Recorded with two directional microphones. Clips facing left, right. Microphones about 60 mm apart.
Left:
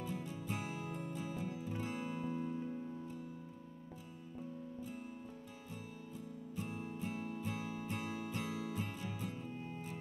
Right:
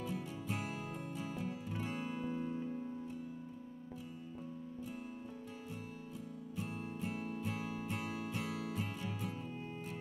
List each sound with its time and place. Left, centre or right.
0.0 s music: right
6.7 s music: right